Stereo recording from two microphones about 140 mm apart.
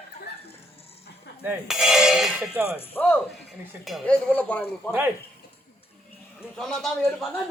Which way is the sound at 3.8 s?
Centre (ahead or behind).